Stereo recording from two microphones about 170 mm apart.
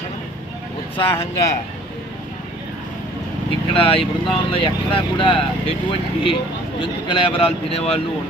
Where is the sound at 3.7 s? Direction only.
30° left (ahead or behind).